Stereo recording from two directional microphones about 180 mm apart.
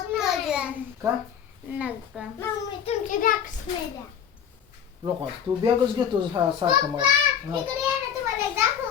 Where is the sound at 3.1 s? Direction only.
50° left (ahead or behind).